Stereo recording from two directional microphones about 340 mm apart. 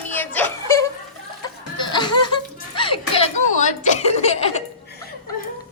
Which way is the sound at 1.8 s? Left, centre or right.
Centre.